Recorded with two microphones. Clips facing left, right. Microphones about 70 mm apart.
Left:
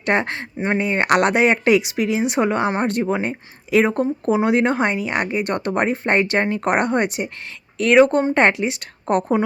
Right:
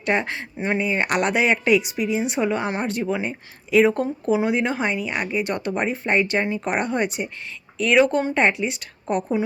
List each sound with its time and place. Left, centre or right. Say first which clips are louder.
0.0 s speech: left 3 dB; left
8.3 s speech: left 4 dB; left